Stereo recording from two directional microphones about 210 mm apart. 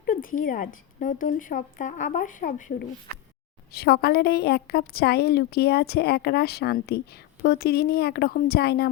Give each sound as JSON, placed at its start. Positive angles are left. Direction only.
{"t": 0.0, "sound": "a woman's voice", "side_deg": 40}